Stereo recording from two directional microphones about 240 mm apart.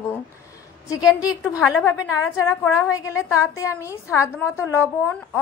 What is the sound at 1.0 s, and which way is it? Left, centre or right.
A woman's voice, centre.